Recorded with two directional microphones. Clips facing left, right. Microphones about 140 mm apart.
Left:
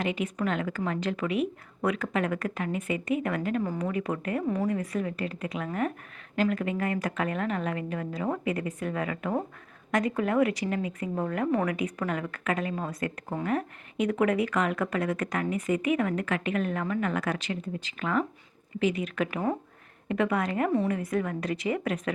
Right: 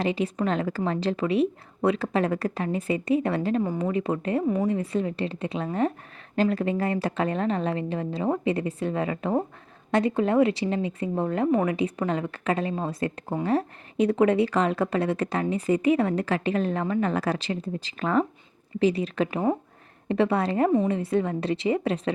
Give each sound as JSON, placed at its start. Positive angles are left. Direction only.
{"t": 0.0, "sound": "a woman's voice", "side_deg": -30}